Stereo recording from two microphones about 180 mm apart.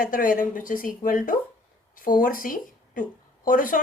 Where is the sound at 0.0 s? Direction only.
50° left (ahead or behind).